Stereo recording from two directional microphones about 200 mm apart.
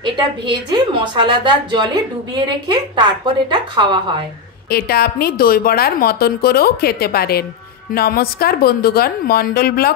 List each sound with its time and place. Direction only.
0.0 s a woman's voice: 20° right (ahead or behind)
4.6 s a woman's voice: 50° left (ahead or behind)